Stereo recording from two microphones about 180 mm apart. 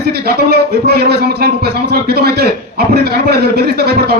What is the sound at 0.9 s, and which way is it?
A man's voice, 65° right (ahead or behind).